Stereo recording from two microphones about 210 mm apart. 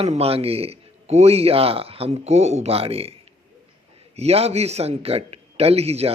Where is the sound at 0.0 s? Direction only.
30° right (ahead or behind).